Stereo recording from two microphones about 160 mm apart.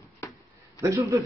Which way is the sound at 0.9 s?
20° right (ahead or behind).